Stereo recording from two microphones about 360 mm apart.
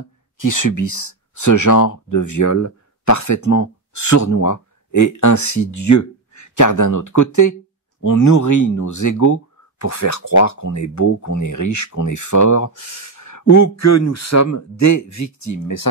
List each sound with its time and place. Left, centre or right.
0.0 s speech: left